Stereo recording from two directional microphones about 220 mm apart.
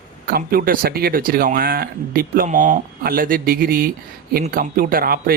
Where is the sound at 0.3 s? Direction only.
40° right (ahead or behind).